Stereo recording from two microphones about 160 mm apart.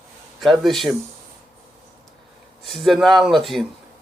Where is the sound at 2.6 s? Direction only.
Centre (ahead or behind).